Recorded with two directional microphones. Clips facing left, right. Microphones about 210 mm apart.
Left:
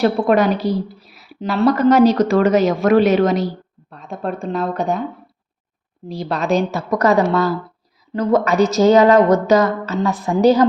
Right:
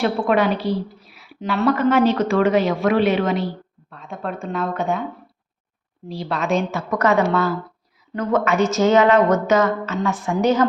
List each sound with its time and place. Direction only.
0.0 s a woman's voice: 40° left (ahead or behind)
6.1 s speech: 40° left (ahead or behind)